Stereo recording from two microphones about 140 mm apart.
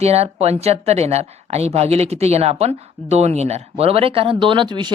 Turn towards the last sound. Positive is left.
turn(degrees=-30)  # may be behind; listen again after turning